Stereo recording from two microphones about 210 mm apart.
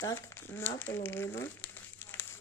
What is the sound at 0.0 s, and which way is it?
Speech, 15° left (ahead or behind).